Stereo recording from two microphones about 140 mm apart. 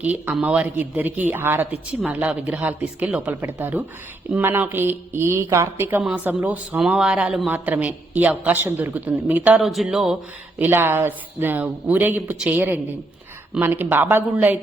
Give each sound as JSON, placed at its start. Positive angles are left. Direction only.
{"t": 0.0, "sound": "speech", "side_deg": -10}
{"t": 10.6, "sound": "speech", "side_deg": -15}